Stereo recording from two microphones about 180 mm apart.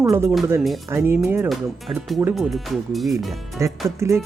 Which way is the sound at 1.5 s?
Centre (ahead or behind).